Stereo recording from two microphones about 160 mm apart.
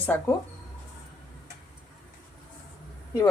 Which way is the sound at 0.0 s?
10° left (ahead or behind).